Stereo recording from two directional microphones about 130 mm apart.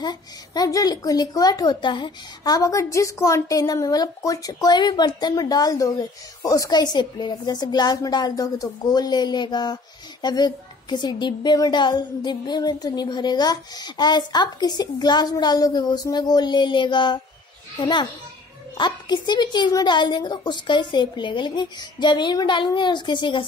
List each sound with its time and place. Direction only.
0.0 s a child's voice: 30° left (ahead or behind)